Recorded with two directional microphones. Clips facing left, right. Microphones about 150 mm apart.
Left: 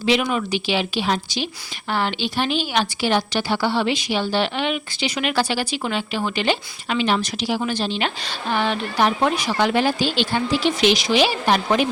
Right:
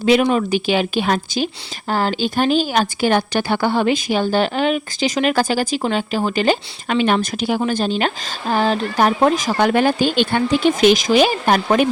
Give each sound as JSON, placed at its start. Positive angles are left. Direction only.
{"t": 0.0, "sound": "speech", "side_deg": -45}